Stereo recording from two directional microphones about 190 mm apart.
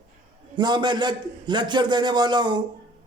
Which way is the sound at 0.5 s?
25° right (ahead or behind).